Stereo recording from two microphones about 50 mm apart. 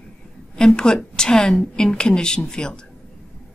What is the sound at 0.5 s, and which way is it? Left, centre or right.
A woman's voice, centre.